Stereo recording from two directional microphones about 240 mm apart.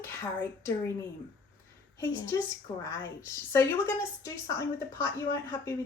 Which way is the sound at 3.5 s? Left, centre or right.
Centre.